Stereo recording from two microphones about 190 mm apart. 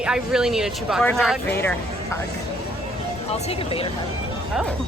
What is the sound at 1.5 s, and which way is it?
Speech, 10° left (ahead or behind).